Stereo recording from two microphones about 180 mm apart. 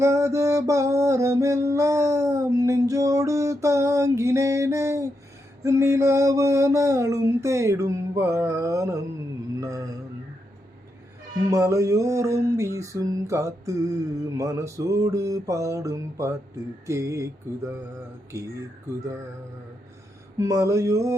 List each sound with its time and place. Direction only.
0.0 s music: 15° right (ahead or behind)
9.6 s mantra: 20° right (ahead or behind)
11.4 s music: 15° right (ahead or behind)
20.4 s music: 15° right (ahead or behind)